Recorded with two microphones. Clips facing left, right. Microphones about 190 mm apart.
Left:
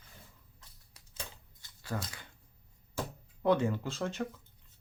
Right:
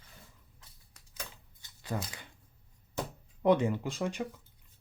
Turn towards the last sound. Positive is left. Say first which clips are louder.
# right 1 dB
turn(degrees=-15)  # may be behind; listen again after turning